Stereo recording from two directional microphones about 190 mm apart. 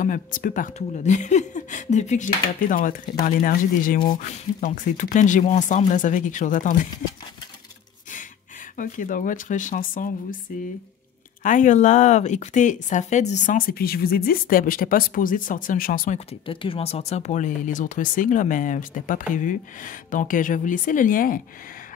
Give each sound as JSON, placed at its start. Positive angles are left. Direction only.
{"t": 0.0, "sound": "speech", "side_deg": 45}
{"t": 8.7, "sound": "speech", "side_deg": 45}
{"t": 16.3, "sound": "speech", "side_deg": 30}